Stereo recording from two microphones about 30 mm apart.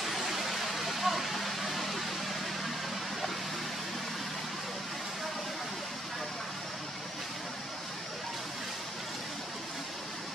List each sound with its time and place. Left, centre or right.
0.0 s vehicle: centre